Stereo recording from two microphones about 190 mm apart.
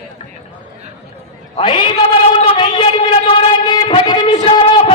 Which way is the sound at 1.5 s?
25° left (ahead or behind).